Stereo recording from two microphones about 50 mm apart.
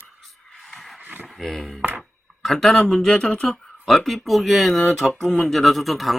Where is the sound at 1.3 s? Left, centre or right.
Centre.